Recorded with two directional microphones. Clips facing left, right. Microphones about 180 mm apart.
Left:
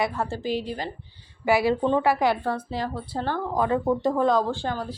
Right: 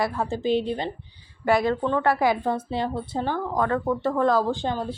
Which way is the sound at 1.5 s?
5° left (ahead or behind).